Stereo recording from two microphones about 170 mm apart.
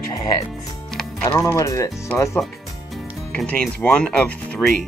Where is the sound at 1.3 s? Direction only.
20° left (ahead or behind).